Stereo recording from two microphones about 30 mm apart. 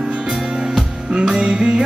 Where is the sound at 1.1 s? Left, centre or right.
Right.